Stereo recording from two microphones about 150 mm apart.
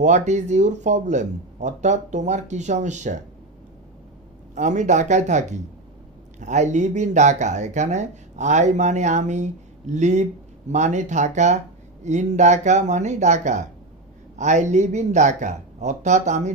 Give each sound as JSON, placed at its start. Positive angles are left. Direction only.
{"t": 0.0, "sound": "speech", "side_deg": -50}
{"t": 4.6, "sound": "speech", "side_deg": -55}